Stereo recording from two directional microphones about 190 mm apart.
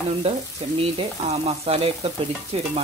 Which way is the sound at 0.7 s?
30° right (ahead or behind).